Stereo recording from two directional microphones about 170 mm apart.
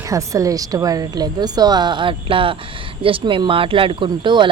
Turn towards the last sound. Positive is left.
turn(degrees=-30)  # may be behind; listen again after turning